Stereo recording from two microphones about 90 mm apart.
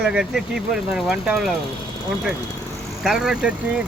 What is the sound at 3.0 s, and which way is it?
Speech, 5° right (ahead or behind).